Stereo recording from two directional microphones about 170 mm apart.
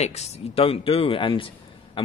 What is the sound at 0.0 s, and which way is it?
A man's voice, 40° left (ahead or behind).